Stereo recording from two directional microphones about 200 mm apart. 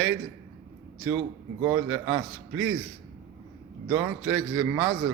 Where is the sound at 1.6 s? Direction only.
15° right (ahead or behind).